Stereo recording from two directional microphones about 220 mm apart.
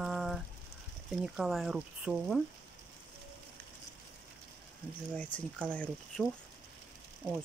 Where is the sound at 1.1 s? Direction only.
Centre (ahead or behind).